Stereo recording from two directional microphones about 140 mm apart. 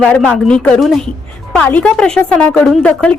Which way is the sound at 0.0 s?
10° left (ahead or behind).